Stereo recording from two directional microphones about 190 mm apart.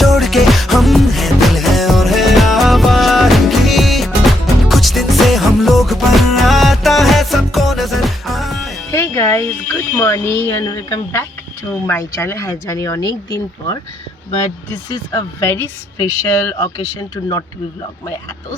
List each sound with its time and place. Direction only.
0.0 s music: centre (ahead or behind)
8.9 s a woman's voice: 15° left (ahead or behind)
14.8 s a woman's voice: 15° left (ahead or behind)